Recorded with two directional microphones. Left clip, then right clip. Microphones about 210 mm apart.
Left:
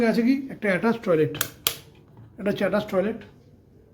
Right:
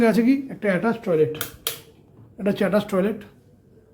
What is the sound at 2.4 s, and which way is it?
Speech, 5° right (ahead or behind).